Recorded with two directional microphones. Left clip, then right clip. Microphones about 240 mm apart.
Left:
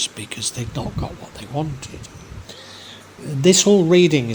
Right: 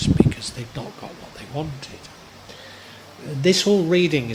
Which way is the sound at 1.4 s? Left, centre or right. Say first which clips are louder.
Left 4 dB; left.